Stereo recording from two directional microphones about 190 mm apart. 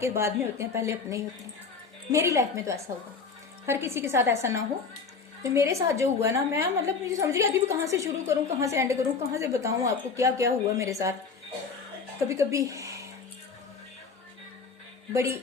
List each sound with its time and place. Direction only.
0.0 s a woman's voice: 15° right (ahead or behind)
12.3 s a woman's voice: 15° right (ahead or behind)
15.1 s a woman's voice: 15° right (ahead or behind)